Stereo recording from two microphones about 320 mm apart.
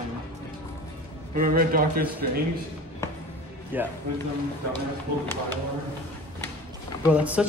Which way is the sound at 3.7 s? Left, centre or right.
Centre.